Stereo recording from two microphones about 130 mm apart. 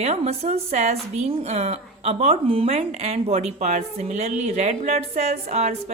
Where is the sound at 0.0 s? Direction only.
55° right (ahead or behind).